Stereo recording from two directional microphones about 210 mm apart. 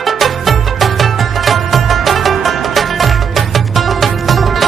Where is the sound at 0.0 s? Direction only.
Centre (ahead or behind).